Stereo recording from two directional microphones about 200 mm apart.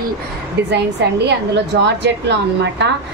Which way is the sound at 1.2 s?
60° right (ahead or behind).